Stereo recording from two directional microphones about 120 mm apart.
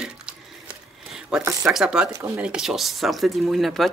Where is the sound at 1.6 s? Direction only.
5° right (ahead or behind).